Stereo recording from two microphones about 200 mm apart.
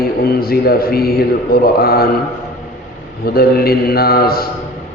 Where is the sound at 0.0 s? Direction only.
50° left (ahead or behind).